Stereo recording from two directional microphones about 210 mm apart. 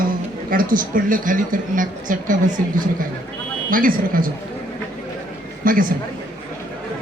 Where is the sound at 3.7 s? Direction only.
40° right (ahead or behind).